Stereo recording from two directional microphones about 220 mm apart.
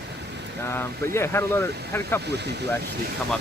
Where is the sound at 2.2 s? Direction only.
50° right (ahead or behind).